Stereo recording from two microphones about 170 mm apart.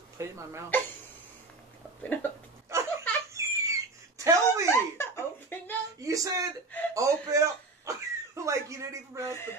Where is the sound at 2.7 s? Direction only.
15° right (ahead or behind).